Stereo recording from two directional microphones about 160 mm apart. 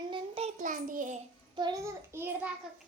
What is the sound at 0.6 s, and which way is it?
Child singing, 55° right (ahead or behind).